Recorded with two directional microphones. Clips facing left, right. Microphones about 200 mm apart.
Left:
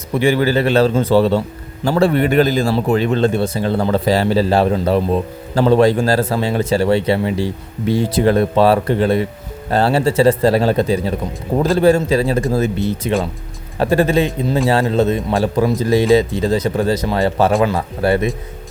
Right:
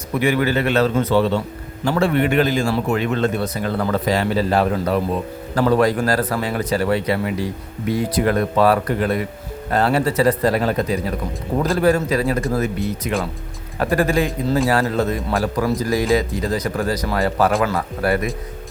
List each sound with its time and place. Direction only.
0.1 s a man's voice: 30° left (ahead or behind)